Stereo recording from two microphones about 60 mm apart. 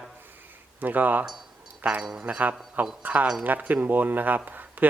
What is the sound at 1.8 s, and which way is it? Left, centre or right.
Speech, centre.